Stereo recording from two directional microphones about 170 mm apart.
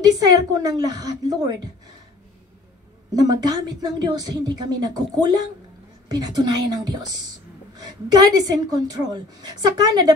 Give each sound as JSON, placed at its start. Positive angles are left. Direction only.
{"t": 0.0, "sound": "a woman's voice", "side_deg": -20}
{"t": 3.1, "sound": "a woman's voice", "side_deg": -20}